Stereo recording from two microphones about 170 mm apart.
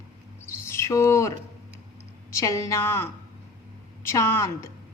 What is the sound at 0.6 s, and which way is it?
A woman's voice, 15° left (ahead or behind).